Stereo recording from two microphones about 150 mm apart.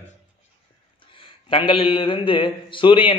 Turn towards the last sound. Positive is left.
turn(degrees=35)  # may be behind; listen again after turning